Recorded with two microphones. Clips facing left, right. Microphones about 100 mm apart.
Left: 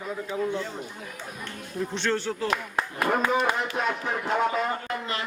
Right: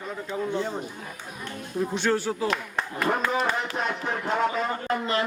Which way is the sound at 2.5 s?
10° left (ahead or behind).